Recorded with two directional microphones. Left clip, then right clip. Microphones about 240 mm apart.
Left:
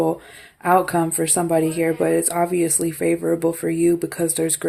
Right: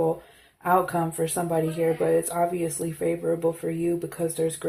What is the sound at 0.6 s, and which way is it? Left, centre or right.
Speech, left.